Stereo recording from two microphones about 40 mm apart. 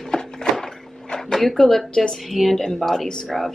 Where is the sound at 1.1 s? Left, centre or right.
Centre.